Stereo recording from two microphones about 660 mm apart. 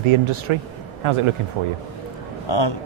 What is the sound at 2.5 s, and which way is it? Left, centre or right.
Speech, left.